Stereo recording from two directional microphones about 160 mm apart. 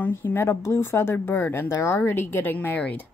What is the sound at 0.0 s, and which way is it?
A woman's voice, 15° left (ahead or behind).